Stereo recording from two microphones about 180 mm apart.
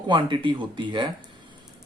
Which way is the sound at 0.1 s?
25° right (ahead or behind).